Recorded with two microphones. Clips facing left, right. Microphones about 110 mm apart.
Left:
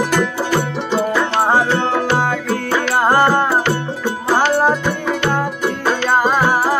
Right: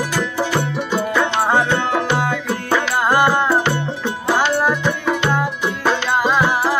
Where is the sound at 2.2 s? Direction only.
40° left (ahead or behind).